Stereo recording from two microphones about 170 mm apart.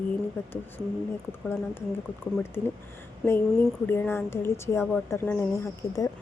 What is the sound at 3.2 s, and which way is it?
Speech, centre (ahead or behind).